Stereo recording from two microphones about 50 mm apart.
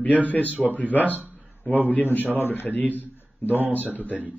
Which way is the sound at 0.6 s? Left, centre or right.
Left.